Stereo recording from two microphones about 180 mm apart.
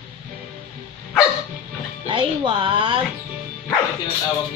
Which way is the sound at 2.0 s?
25° right (ahead or behind).